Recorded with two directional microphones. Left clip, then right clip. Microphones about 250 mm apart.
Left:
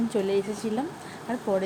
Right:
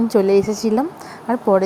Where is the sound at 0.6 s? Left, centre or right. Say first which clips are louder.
Right 11 dB; right.